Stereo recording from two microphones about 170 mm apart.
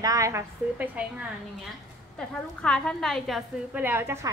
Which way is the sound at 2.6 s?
5° left (ahead or behind).